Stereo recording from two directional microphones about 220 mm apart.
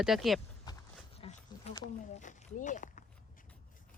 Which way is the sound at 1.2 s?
30° left (ahead or behind).